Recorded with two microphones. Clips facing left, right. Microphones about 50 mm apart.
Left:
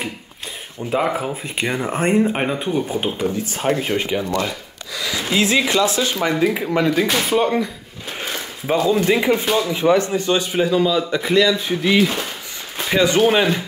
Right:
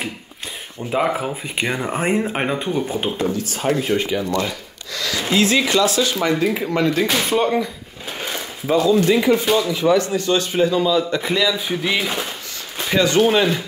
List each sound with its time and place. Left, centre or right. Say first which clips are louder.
0.7 s a man's voice: even; centre
3.4 s speech: even; left
4.5 s wood: even; centre
5.3 s speech: right 1 dB; centre
6.2 s a man's voice: even; centre
8.8 s a man's voice: right 1 dB; centre
12.7 s a sound: left 1 dB; centre
13.2 s speech: even; centre